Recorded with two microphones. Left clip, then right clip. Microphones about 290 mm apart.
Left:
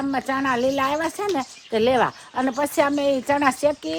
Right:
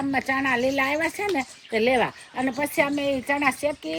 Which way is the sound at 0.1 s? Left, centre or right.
Centre.